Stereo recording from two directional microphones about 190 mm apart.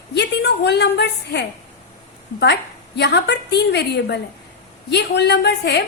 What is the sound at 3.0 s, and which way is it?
A woman's voice, 65° left (ahead or behind).